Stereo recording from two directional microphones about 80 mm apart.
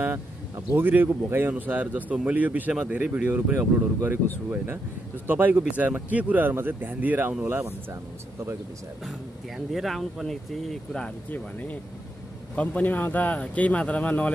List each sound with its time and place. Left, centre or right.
0.7 s speech: right
5.2 s speech: right
7.4 s speech: right
9.7 s speech: centre
11.2 s speech: left